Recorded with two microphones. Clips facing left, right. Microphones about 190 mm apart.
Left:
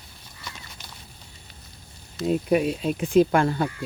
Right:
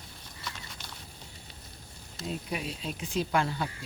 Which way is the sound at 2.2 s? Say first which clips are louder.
Left 14 dB; 55° left (ahead or behind).